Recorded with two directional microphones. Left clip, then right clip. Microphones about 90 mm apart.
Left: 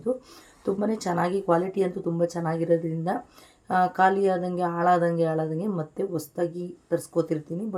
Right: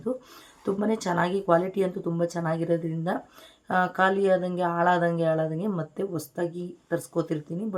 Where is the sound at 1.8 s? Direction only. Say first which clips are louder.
Left 1 dB; 15° right (ahead or behind).